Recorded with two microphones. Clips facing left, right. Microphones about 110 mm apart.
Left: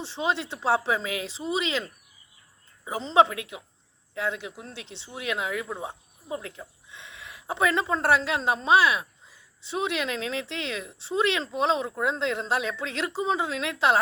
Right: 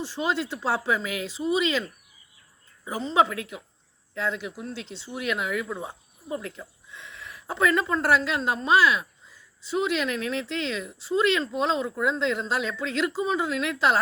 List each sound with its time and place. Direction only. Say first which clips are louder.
0.0 s speech: right 1 dB; 25° left (ahead or behind)
6.2 s speech: right 2 dB; 10° left (ahead or behind)